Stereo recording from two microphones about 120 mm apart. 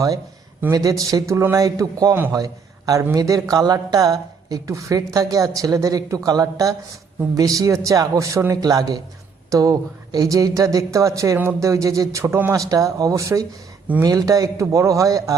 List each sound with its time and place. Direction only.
0.7 s a man's voice: 30° right (ahead or behind)